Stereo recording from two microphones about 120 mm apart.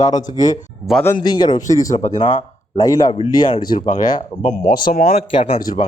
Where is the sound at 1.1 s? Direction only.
35° left (ahead or behind).